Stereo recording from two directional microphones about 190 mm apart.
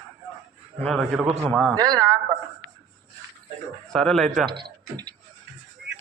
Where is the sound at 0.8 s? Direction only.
Centre (ahead or behind).